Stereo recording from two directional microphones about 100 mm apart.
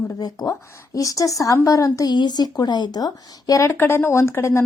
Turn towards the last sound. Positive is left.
turn(degrees=25)  # may be behind; listen again after turning